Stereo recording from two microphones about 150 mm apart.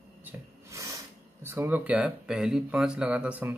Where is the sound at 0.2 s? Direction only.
15° right (ahead or behind).